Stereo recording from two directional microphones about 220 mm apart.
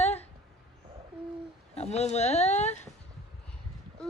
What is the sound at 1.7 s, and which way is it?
Speech, 30° left (ahead or behind).